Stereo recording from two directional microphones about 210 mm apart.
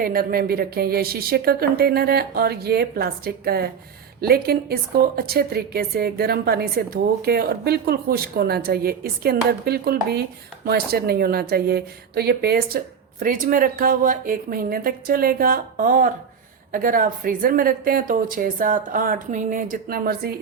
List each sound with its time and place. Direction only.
0.0 s a woman's voice: 45° right (ahead or behind)